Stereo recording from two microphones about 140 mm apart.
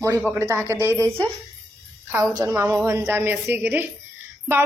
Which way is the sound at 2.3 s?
20° right (ahead or behind).